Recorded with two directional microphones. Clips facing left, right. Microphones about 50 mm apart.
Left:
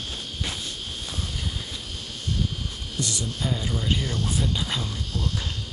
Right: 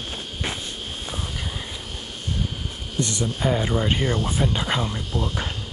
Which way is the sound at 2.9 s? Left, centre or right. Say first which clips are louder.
Right 5 dB; right.